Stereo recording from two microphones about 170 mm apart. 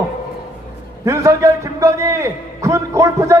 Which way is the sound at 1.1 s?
20° right (ahead or behind).